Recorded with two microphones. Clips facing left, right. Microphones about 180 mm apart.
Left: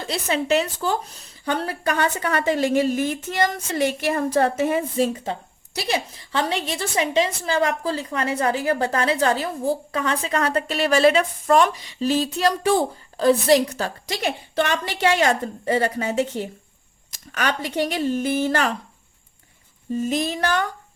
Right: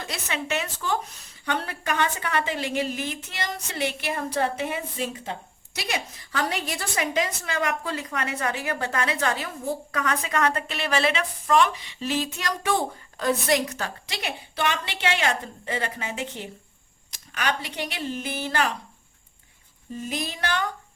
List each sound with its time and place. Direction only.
0.0 s a woman's voice: 35° left (ahead or behind)
20.0 s speech: 45° left (ahead or behind)